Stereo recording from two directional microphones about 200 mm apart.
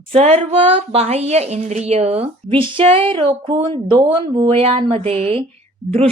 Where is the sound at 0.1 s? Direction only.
30° right (ahead or behind).